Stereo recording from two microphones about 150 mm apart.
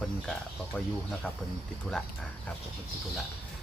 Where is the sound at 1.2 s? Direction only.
5° left (ahead or behind).